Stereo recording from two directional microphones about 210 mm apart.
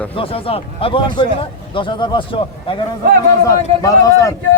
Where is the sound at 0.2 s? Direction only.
25° left (ahead or behind).